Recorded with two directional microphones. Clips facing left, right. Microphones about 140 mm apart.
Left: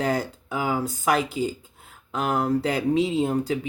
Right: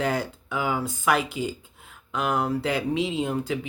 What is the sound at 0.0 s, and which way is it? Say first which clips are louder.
Speech: left 1 dB; 40° left (ahead or behind).